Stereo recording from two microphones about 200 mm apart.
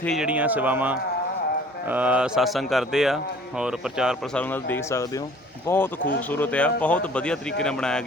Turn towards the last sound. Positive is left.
turn(degrees=5)  # may be behind; listen again after turning